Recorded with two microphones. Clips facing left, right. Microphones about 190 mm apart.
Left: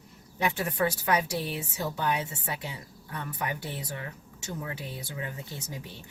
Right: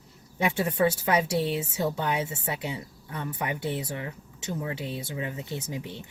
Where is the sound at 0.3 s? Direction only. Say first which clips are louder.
Right 3 dB; 25° right (ahead or behind).